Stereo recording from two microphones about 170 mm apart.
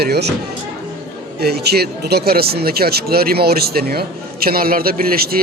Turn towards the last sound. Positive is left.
turn(degrees=-60)  # may be behind; listen again after turning